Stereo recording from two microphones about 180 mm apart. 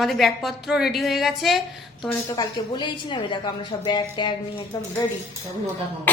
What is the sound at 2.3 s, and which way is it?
Speech, 25° left (ahead or behind).